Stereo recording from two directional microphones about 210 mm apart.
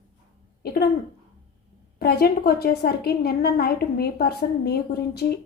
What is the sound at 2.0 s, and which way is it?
A woman's voice, 45° left (ahead or behind).